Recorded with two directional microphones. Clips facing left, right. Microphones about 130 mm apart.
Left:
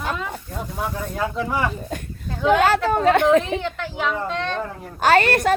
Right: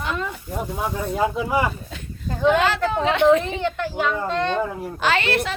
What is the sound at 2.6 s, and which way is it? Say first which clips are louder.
Speech: left 3 dB; 45° left (ahead or behind).